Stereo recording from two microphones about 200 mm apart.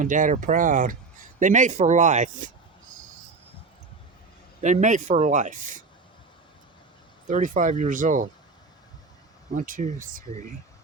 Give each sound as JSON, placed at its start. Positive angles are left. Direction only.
{"t": 0.0, "sound": "speech", "side_deg": -40}
{"t": 4.6, "sound": "speech", "side_deg": -40}
{"t": 7.3, "sound": "speech", "side_deg": -40}
{"t": 9.6, "sound": "speech", "side_deg": -40}